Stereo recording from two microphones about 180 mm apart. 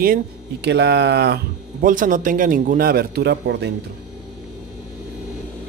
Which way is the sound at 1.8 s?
50° right (ahead or behind).